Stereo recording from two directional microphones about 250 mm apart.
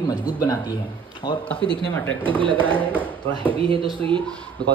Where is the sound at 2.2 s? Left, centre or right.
Centre.